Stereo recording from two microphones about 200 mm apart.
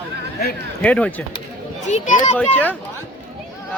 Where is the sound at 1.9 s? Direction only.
40° left (ahead or behind).